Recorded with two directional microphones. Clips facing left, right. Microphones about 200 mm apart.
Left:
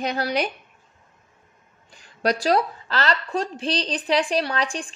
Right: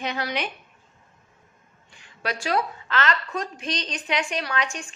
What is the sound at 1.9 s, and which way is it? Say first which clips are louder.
A woman's voice: left 8 dB; 40° left (ahead or behind).